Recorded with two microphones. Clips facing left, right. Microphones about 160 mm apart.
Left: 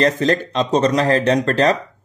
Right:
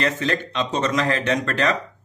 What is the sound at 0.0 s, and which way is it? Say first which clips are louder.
Speech: left 7 dB; 35° left (ahead or behind).